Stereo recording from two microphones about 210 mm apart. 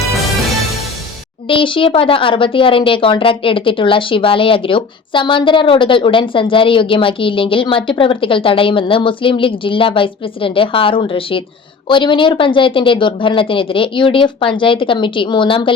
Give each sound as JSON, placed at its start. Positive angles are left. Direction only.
{"t": 1.5, "sound": "speech", "side_deg": 25}